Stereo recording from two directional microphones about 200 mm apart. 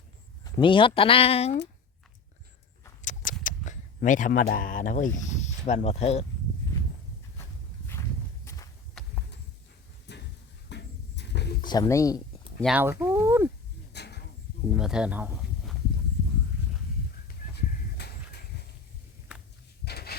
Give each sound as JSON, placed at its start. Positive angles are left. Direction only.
{"t": 0.6, "sound": "speech", "side_deg": 25}
{"t": 3.0, "sound": "horse", "side_deg": 40}
{"t": 3.4, "sound": "speech", "side_deg": 40}
{"t": 8.4, "sound": "walk", "side_deg": 15}
{"t": 10.1, "sound": "a sound", "side_deg": 60}
{"t": 11.6, "sound": "speech", "side_deg": 20}
{"t": 12.6, "sound": "speech", "side_deg": -10}
{"t": 13.9, "sound": "a sound", "side_deg": 55}
{"t": 14.7, "sound": "speech", "side_deg": -5}
{"t": 19.8, "sound": "a sound", "side_deg": 55}